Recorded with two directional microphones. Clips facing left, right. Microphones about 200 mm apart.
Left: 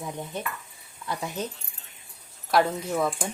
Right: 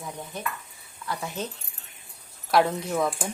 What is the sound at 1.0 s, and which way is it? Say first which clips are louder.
Speech: left 1 dB; 15° left (ahead or behind).